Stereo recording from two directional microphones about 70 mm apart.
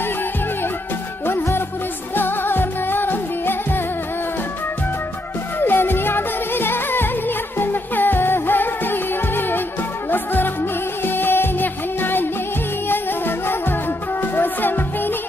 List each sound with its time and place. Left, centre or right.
1.2 s music: left
5.6 s music: left
14.2 s music: left